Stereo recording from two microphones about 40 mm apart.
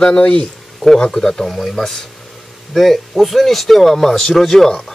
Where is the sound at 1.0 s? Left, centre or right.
Centre.